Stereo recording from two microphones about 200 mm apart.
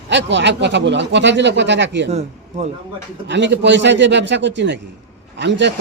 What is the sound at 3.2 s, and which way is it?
Speech, 60° right (ahead or behind).